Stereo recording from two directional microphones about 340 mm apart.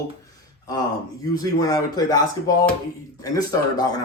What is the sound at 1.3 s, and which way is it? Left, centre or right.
A man's voice, centre.